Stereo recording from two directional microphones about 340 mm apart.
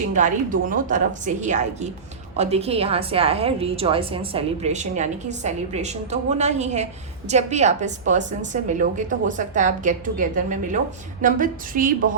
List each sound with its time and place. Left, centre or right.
0.2 s a woman's voice: right